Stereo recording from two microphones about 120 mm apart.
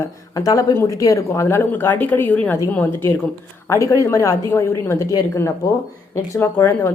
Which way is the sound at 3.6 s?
25° left (ahead or behind).